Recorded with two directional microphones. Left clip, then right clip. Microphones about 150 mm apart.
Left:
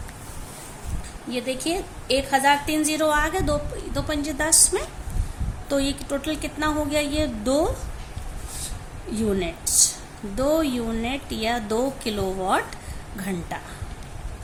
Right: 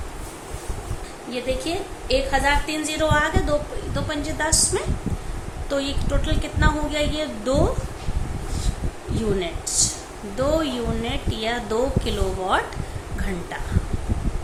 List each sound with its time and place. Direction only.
1.3 s a woman's voice: 60° left (ahead or behind)
9.4 s a woman's voice: 50° left (ahead or behind)